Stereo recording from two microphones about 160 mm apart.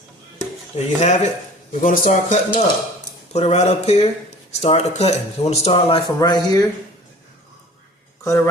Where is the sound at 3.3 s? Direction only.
40° left (ahead or behind); by 6.6 s 25° left (ahead or behind).